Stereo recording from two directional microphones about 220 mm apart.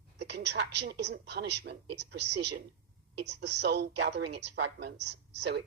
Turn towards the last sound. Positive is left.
turn(degrees=-50)  # may be behind; listen again after turning